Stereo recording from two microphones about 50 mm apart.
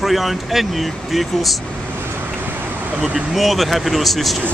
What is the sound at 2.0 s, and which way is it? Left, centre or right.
Vehicle, right.